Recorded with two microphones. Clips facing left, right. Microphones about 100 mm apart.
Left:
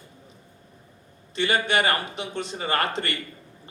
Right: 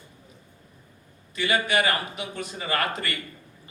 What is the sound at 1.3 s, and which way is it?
Speech, 30° left (ahead or behind).